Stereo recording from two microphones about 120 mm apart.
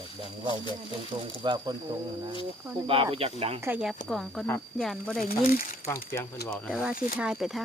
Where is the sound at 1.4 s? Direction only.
35° right (ahead or behind).